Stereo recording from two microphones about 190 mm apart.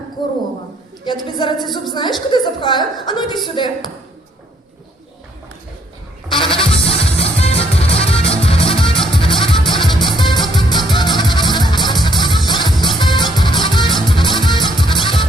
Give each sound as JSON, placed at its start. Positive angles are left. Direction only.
{"t": 0.2, "sound": "a woman's voice", "side_deg": 25}
{"t": 6.3, "sound": "music", "side_deg": 25}